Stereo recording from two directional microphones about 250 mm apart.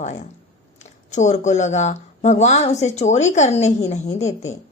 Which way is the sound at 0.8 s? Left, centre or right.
Left.